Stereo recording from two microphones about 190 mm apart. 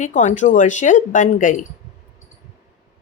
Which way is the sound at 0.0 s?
40° left (ahead or behind).